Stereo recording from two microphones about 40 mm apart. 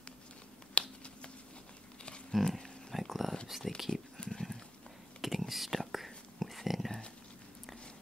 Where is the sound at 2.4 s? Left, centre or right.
Centre.